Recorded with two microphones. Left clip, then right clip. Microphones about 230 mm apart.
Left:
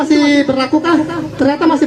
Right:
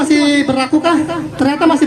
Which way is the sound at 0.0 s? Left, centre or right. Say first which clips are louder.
Left 1 dB; right.